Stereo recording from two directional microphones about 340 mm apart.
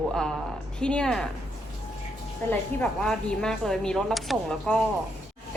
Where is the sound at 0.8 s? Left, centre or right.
Centre.